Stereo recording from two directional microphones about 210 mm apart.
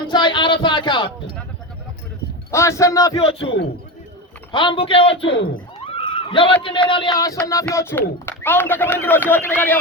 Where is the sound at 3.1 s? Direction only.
25° left (ahead or behind).